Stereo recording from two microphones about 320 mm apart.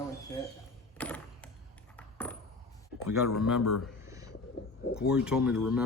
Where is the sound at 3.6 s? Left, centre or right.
Left.